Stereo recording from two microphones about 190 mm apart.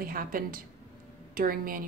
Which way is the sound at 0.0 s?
50° right (ahead or behind).